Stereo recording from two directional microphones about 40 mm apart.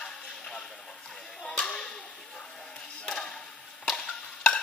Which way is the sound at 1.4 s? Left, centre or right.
Centre.